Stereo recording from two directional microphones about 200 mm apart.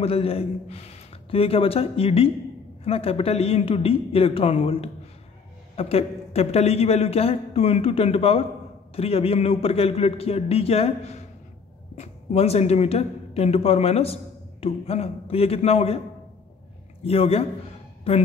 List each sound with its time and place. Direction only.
0.0 s a man's voice: 30° left (ahead or behind)
17.0 s a man's voice: 30° left (ahead or behind)